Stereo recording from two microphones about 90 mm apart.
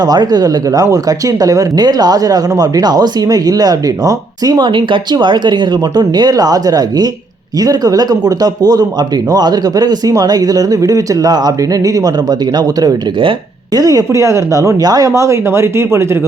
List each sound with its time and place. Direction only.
0.0 s speech: 50° right (ahead or behind)
5.1 s speech: 55° right (ahead or behind); by 16.0 s 30° right (ahead or behind)